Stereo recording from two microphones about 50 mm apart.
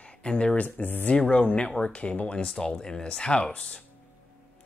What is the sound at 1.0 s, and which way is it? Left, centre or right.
Speech, left.